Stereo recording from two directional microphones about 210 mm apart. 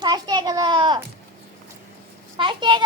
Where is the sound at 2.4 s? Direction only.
25° right (ahead or behind).